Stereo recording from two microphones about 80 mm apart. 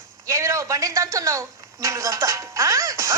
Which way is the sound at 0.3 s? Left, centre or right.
Right.